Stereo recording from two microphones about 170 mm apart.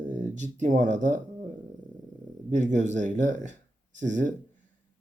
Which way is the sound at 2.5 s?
45° right (ahead or behind).